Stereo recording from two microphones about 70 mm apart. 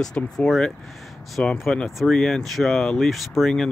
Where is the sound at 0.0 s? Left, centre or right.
Centre.